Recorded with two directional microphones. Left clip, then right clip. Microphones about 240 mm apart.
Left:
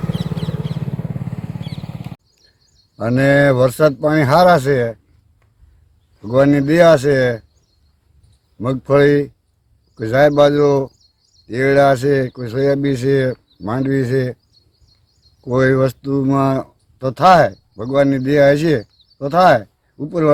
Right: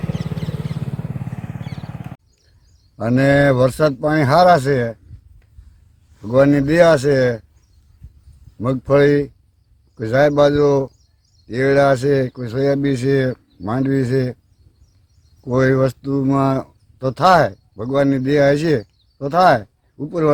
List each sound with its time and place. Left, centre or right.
0.2 s wild animals: centre
0.6 s wild animals: centre
2.9 s speech: centre
6.2 s speech: centre
8.5 s speech: centre
15.4 s speech: centre